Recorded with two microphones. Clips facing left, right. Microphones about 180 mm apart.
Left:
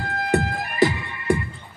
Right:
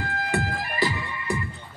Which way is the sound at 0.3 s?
45° left (ahead or behind).